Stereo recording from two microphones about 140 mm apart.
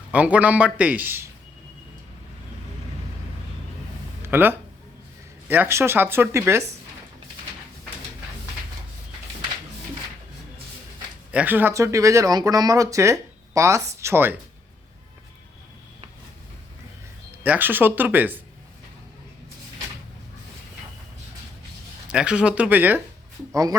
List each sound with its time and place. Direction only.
0.1 s a man's voice: 10° right (ahead or behind)
4.2 s a sound: 15° right (ahead or behind)
5.5 s a man's voice: 15° right (ahead or behind)
11.3 s speech: 10° right (ahead or behind)
17.4 s a man's voice: 15° right (ahead or behind)
22.1 s a man's voice: 5° right (ahead or behind)